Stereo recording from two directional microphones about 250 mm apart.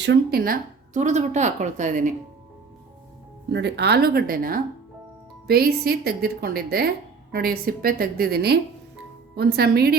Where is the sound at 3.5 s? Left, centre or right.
Right.